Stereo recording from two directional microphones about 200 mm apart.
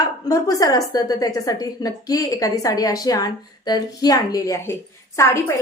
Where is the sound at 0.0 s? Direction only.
15° left (ahead or behind).